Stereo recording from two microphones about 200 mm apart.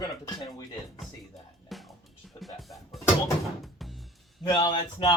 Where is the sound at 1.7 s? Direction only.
Centre (ahead or behind).